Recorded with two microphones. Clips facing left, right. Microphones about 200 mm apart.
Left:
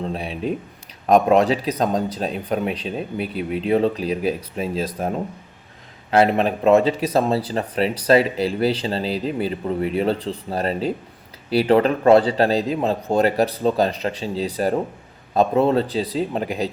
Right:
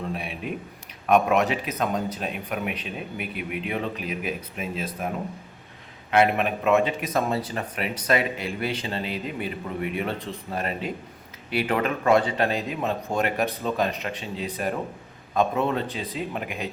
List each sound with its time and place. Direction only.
0.0 s a sound: 30° left (ahead or behind)
1.0 s speech: 35° left (ahead or behind)
6.1 s speech: 30° left (ahead or behind)